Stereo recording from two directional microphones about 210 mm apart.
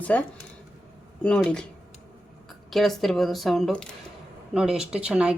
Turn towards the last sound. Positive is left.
turn(degrees=-5)  # may be behind; listen again after turning